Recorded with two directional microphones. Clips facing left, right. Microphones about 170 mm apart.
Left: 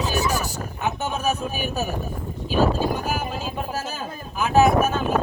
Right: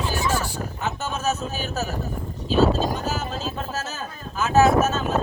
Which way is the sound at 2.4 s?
10° left (ahead or behind).